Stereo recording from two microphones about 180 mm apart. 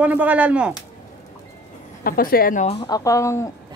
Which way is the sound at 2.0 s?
55° left (ahead or behind).